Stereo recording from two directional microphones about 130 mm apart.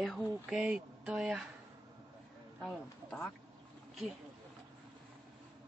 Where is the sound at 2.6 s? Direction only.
5° left (ahead or behind).